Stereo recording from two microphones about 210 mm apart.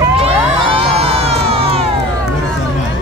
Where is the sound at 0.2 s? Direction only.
25° right (ahead or behind).